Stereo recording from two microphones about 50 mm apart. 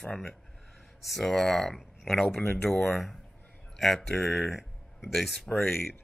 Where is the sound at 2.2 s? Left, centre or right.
Centre.